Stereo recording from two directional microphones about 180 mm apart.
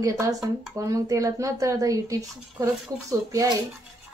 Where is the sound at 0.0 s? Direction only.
20° right (ahead or behind).